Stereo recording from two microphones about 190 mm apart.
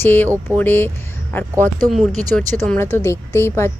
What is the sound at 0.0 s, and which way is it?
A woman's voice, 10° left (ahead or behind).